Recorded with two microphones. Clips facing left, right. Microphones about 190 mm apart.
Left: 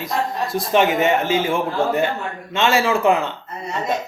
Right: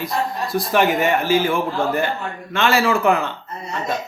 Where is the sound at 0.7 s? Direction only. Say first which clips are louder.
Left 1 dB; 20° left (ahead or behind).